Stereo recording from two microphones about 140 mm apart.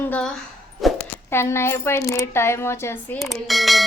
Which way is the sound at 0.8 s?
Centre (ahead or behind).